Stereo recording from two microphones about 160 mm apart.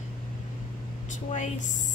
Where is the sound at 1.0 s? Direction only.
50° left (ahead or behind).